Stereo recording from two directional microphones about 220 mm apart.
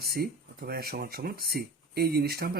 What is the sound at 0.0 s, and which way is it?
Speech, 45° right (ahead or behind).